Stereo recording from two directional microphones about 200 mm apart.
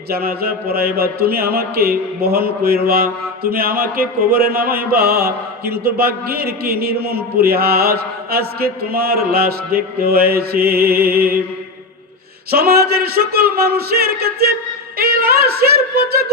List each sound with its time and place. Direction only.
0.1 s speech: 50° right (ahead or behind)
12.5 s a woman's voice: 50° right (ahead or behind)